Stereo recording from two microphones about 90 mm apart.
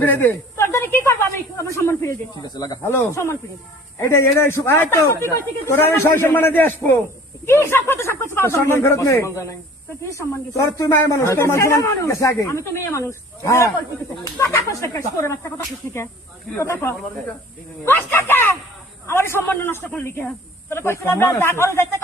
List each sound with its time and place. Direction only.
0.0 s a sound: 20° left (ahead or behind)
1.7 s speech: 30° left (ahead or behind)
2.4 s speech: 45° left (ahead or behind)
2.8 s a man's voice: 25° left (ahead or behind)
17.8 s snake: 25° left (ahead or behind)
19.0 s a man's voice: 30° left (ahead or behind)